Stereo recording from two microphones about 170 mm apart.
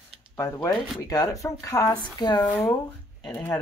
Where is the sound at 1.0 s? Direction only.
20° left (ahead or behind).